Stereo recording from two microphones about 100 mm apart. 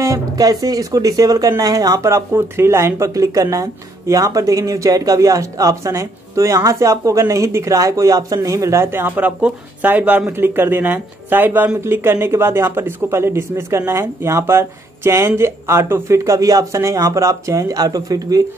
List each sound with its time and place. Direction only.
0.0 s speech: 35° right (ahead or behind)